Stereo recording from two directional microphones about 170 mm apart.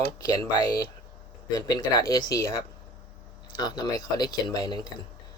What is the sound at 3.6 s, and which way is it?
Speech, 25° left (ahead or behind).